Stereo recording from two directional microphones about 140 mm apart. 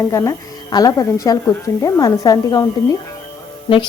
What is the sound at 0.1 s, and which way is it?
A woman's voice, 25° left (ahead or behind).